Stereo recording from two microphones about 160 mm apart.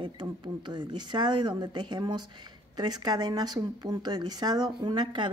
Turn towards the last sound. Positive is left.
turn(degrees=-30)  # may be behind; listen again after turning